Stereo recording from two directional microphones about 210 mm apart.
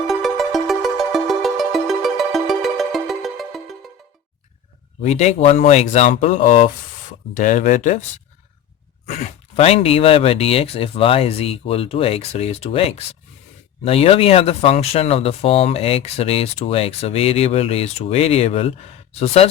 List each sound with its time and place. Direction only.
0.1 s music: centre (ahead or behind)
5.0 s speech: 30° left (ahead or behind)
9.0 s speech: 30° left (ahead or behind)
13.8 s speech: 30° left (ahead or behind)